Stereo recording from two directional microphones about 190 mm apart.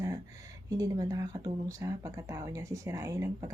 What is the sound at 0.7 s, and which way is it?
Speech, 15° right (ahead or behind).